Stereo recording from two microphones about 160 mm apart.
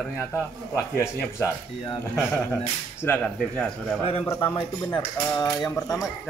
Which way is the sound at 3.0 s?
15° left (ahead or behind).